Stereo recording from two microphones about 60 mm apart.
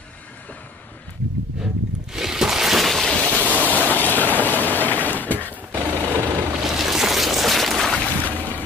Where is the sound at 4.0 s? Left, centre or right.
Left.